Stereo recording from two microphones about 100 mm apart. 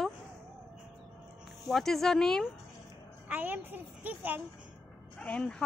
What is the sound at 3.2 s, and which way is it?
A woman's voice, 20° right (ahead or behind).